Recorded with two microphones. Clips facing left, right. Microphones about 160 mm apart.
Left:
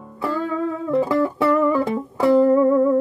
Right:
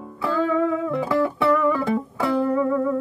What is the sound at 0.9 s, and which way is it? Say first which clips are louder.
Music: left 4 dB; 40° left (ahead or behind).